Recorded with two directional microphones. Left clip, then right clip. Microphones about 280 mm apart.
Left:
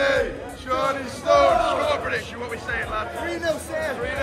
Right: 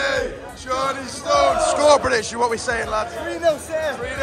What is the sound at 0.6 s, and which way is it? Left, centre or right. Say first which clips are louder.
Music: right 1 dB; centre.